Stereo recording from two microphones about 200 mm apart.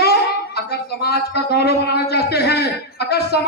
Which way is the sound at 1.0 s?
55° left (ahead or behind).